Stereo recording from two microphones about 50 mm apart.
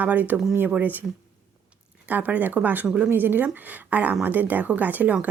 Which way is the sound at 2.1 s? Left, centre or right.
Right.